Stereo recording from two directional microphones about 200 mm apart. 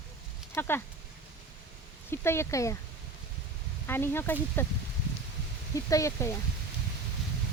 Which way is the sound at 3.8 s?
10° left (ahead or behind).